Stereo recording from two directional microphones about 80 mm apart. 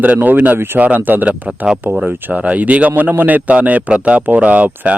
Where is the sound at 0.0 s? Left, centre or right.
Right.